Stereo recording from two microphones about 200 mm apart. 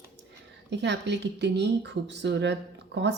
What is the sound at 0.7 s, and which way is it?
Speech, 60° right (ahead or behind).